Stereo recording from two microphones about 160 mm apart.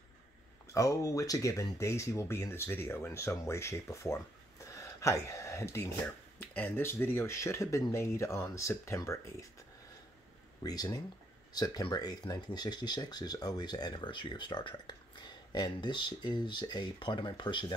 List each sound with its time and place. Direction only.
0.7 s speech: 20° left (ahead or behind)
4.7 s gasp: 20° left (ahead or behind)
6.4 s speech: 10° left (ahead or behind)
10.6 s speech: 25° left (ahead or behind)